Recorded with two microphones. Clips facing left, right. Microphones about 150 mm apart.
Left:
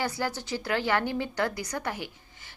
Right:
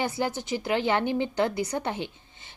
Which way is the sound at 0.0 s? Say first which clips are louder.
Right 2 dB; 20° right (ahead or behind).